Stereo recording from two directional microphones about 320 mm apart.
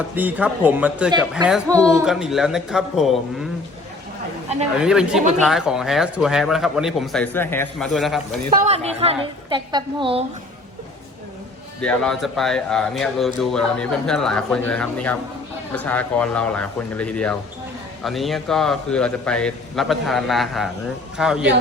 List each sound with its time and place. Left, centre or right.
0.2 s a man's voice: centre
4.8 s a man's voice: centre
8.6 s a woman's voice: centre
11.8 s a man's voice: centre